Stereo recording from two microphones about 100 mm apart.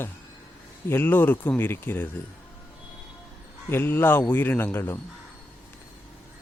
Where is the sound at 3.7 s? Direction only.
20° left (ahead or behind).